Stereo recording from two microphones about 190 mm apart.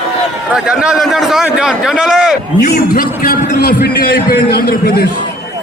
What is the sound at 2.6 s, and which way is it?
A man's voice, 50° left (ahead or behind).